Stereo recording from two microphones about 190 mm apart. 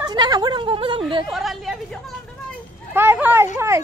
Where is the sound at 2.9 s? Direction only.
10° right (ahead or behind).